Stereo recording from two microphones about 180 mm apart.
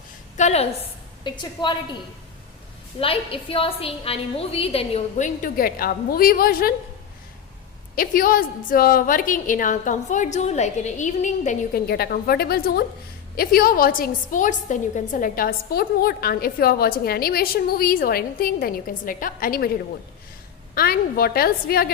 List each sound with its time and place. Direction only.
0.3 s a woman's voice: 40° left (ahead or behind)
1.2 s a woman's voice: 25° left (ahead or behind)
3.0 s a woman's voice: 30° left (ahead or behind); by 6.7 s 55° left (ahead or behind)
7.9 s a woman's voice: 50° left (ahead or behind)
11.9 s a woman's voice: 60° left (ahead or behind)
20.7 s a woman's voice: 55° left (ahead or behind)